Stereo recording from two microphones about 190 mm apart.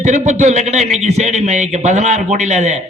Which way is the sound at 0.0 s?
40° right (ahead or behind).